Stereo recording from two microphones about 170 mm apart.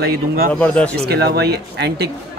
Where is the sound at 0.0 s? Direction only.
65° right (ahead or behind).